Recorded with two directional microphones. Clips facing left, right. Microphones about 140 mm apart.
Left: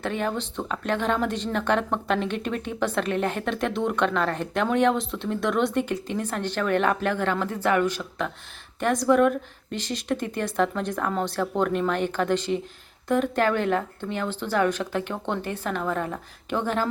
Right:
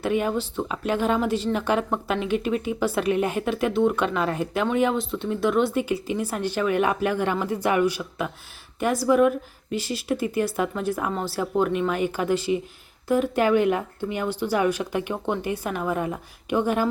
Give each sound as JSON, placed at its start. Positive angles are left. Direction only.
{"t": 0.0, "sound": "speech", "side_deg": -10}